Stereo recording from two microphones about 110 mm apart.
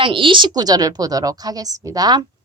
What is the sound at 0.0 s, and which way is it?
Speech, 50° right (ahead or behind).